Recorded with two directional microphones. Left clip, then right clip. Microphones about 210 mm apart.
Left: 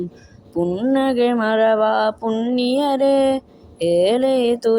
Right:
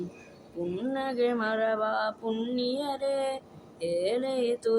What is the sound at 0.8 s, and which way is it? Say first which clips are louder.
Mantra: left 10 dB; 35° left (ahead or behind).